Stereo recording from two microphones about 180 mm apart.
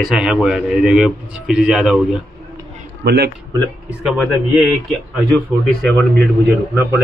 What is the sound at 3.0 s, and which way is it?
Speech, 60° right (ahead or behind).